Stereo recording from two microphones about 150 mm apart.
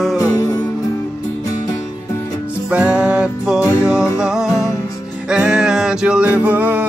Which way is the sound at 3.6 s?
20° left (ahead or behind).